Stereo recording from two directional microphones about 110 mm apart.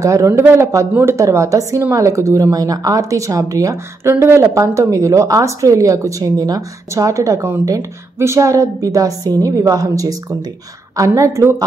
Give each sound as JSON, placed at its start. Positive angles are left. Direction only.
{"t": 0.0, "sound": "a woman's voice", "side_deg": -30}